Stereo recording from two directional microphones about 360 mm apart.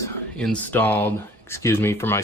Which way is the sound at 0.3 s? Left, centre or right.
Centre.